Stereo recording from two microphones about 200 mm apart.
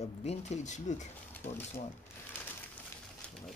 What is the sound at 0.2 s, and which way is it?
Speech, 35° left (ahead or behind).